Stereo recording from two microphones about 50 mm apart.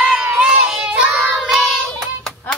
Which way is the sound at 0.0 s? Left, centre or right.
Centre.